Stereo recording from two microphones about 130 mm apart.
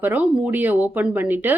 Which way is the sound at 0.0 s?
10° right (ahead or behind).